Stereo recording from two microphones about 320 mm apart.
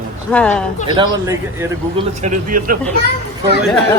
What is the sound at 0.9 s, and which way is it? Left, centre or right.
Speech, centre.